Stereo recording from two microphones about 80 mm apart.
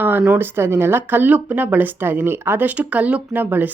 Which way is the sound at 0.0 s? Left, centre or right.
Right.